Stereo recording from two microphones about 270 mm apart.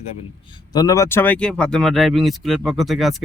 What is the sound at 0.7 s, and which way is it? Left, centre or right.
Speech, centre.